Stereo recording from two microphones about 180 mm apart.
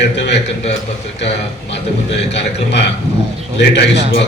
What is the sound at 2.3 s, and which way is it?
Speech, 70° left (ahead or behind).